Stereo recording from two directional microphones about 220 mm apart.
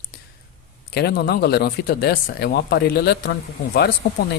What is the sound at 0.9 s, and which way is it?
Speech, 45° left (ahead or behind).